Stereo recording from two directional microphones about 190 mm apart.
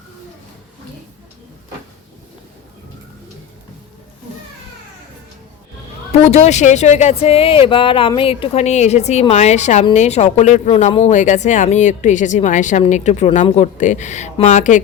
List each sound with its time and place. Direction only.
6.1 s speech: 35° left (ahead or behind)